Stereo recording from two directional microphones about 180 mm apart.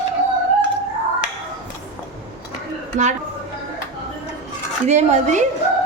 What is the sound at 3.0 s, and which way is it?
Speech, 45° right (ahead or behind).